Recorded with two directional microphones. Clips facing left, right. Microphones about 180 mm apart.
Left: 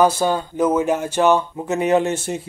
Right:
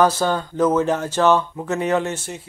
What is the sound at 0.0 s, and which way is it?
Speech, 10° left (ahead or behind).